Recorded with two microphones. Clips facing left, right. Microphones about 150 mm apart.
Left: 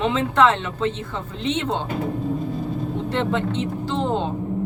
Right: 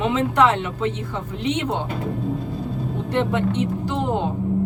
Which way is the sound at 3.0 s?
15° right (ahead or behind).